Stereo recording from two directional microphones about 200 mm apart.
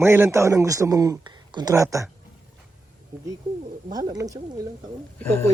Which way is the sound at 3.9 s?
20° right (ahead or behind).